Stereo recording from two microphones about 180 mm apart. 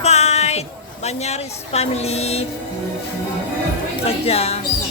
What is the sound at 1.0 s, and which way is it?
A woman's voice, 35° left (ahead or behind).